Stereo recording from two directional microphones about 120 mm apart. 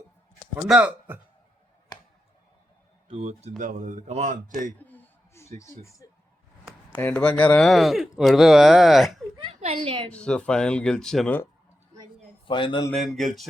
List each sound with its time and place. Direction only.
0.7 s speech: 10° right (ahead or behind)
3.1 s speech: 60° right (ahead or behind)
3.6 s a man's voice: 90° right
4.8 s a sound: 15° left (ahead or behind)
5.5 s speech: 25° left (ahead or behind)
6.9 s speech: 10° left (ahead or behind)
9.5 s a woman's voice: 65° right (ahead or behind)
9.7 s a woman's voice: 45° right (ahead or behind)
10.1 s speech: 10° left (ahead or behind)
12.5 s a man's voice: 45° left (ahead or behind)
12.9 s speech: centre (ahead or behind)